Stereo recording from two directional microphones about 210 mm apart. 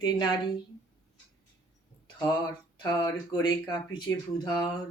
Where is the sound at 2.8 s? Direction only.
20° left (ahead or behind).